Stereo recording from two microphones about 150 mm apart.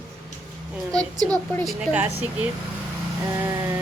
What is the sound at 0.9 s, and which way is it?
Speech, 25° right (ahead or behind).